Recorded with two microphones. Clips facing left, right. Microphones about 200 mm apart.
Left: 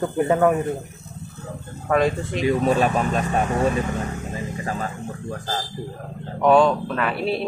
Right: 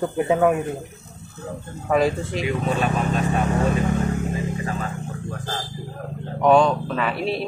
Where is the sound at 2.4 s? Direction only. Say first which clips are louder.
Left 5 dB; 40° left (ahead or behind).